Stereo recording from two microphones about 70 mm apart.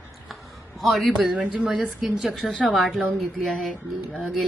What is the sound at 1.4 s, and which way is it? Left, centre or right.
A woman's voice, centre.